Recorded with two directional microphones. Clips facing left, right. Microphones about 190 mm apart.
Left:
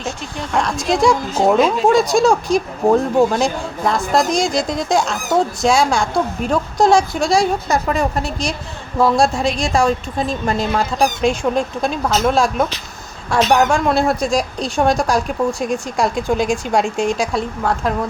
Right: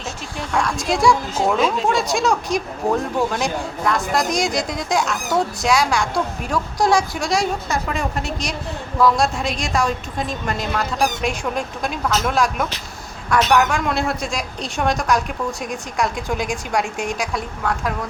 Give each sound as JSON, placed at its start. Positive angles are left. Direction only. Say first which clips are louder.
{"t": 0.5, "sound": "speech", "louder": "left 3 dB", "side_deg": 20}
{"t": 1.5, "sound": "a woman's voice", "louder": "left 6 dB", "side_deg": 40}